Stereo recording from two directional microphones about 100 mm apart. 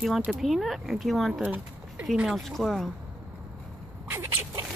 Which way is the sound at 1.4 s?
15° right (ahead or behind).